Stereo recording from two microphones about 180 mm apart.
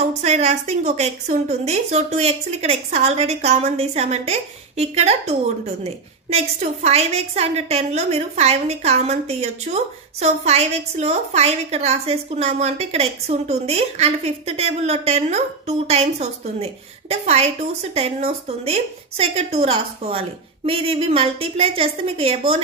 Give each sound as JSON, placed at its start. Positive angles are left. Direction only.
{"t": 0.2, "sound": "a woman's voice", "side_deg": -40}